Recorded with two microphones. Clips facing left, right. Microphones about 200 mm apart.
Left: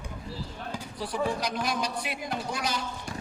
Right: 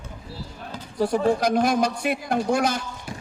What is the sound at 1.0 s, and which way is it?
A man's voice, 45° right (ahead or behind).